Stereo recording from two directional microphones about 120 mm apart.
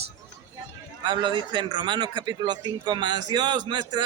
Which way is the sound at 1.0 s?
40° right (ahead or behind).